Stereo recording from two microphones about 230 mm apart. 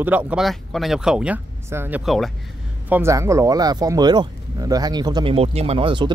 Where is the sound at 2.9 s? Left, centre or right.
Centre.